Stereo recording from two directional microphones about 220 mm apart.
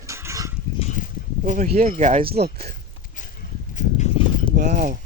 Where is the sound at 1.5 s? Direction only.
35° right (ahead or behind).